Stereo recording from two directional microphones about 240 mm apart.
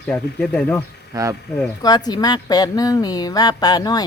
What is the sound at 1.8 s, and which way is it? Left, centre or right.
A woman's voice, centre.